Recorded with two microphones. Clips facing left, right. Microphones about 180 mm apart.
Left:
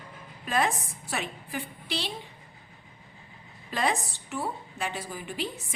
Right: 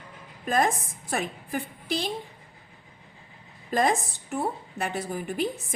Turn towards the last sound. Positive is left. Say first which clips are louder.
# right 6 dB
turn(degrees=-50)  # may be behind; listen again after turning